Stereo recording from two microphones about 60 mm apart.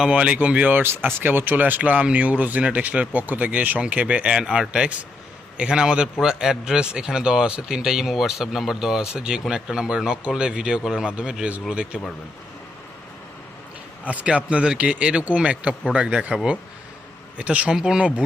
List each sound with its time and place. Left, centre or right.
0.1 s a man's voice: centre
14.0 s a man's voice: right